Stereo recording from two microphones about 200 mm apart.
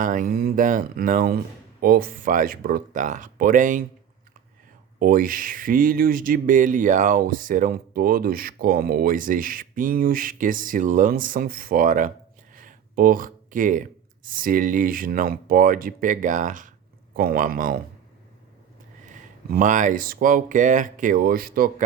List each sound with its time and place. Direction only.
0.0 s speech: 40° right (ahead or behind)
4.9 s speech: 45° right (ahead or behind)
12.5 s a sound: 45° right (ahead or behind)
14.3 s speech: 45° right (ahead or behind)
19.1 s speech: 40° right (ahead or behind)